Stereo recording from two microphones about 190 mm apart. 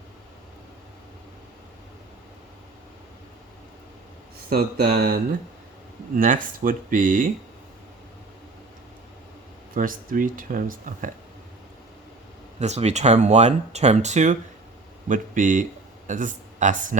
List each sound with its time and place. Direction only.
4.4 s speech: 55° right (ahead or behind)
9.7 s speech: 45° right (ahead or behind)
12.5 s speech: 35° right (ahead or behind)